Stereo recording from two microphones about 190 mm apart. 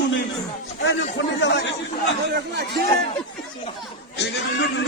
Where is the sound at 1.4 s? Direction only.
65° left (ahead or behind).